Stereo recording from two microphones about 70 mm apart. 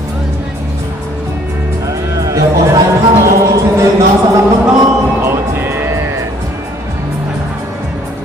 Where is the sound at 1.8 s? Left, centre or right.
Right.